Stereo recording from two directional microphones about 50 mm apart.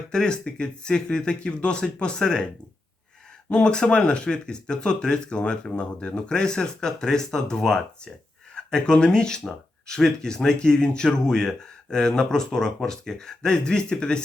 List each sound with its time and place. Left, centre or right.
0.1 s speech: centre
3.5 s speech: centre